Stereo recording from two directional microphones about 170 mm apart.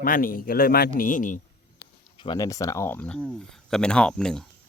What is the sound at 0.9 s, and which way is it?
Speech, 50° left (ahead or behind).